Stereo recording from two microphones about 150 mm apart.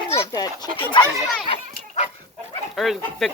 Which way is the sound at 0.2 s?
25° left (ahead or behind).